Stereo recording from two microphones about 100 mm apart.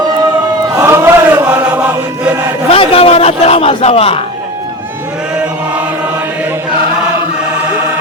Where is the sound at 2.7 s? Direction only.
75° left (ahead or behind).